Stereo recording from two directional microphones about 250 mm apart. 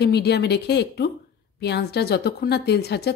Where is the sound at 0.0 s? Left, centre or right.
Left.